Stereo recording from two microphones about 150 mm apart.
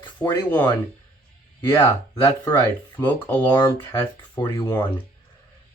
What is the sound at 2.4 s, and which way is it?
Speech, 25° left (ahead or behind).